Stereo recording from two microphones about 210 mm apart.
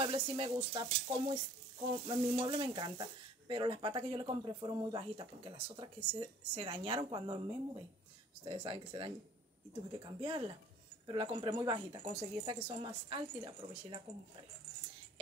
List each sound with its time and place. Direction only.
0.0 s stir: 25° right (ahead or behind)